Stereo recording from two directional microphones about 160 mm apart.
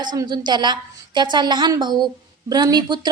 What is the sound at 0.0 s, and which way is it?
Speech, 25° right (ahead or behind).